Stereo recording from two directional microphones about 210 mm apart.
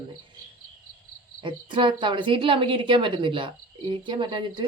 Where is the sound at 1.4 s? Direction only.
25° right (ahead or behind).